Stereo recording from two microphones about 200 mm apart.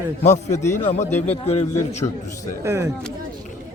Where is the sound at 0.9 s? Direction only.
35° left (ahead or behind).